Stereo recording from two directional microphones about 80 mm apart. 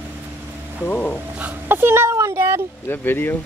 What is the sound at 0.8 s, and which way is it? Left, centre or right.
Speech, left.